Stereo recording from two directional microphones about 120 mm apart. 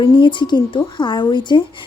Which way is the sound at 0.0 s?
40° left (ahead or behind).